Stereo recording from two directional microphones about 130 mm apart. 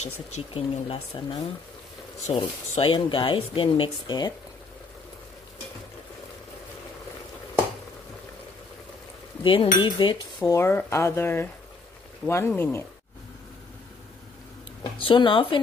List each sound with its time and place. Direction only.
0.0 s speech: 60° left (ahead or behind)
0.6 s speech: 45° left (ahead or behind)
9.4 s cutlery: 40° left (ahead or behind)
10.5 s speech: 20° left (ahead or behind)
14.8 s cutlery: 40° left (ahead or behind)